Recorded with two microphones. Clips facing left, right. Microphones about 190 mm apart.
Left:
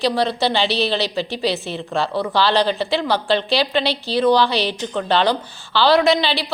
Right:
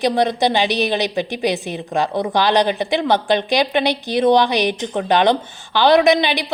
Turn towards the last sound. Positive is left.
turn(degrees=-20)  # may be behind; listen again after turning